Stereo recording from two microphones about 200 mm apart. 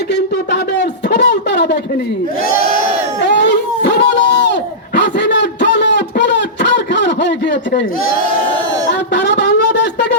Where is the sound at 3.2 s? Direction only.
60° left (ahead or behind).